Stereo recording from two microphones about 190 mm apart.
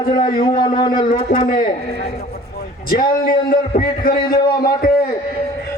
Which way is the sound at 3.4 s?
50° left (ahead or behind).